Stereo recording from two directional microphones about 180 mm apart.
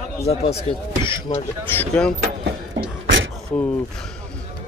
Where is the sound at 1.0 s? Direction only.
30° left (ahead or behind).